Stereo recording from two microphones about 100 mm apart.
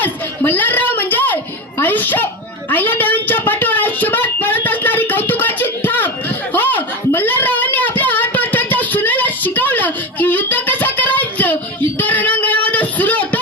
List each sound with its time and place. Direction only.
0.0 s chatter: 20° left (ahead or behind)
1.8 s a child's voice: 20° left (ahead or behind)
2.6 s a sound: 20° left (ahead or behind)